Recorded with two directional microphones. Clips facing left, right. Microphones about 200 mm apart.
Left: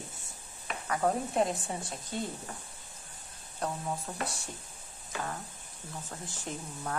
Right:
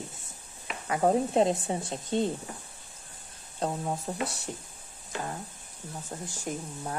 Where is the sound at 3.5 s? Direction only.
30° right (ahead or behind).